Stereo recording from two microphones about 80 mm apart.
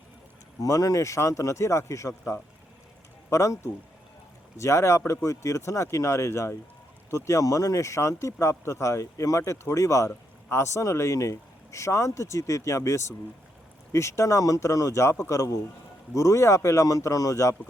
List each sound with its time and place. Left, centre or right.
0.6 s speech: left